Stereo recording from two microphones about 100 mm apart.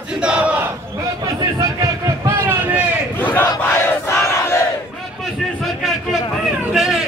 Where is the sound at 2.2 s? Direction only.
20° right (ahead or behind).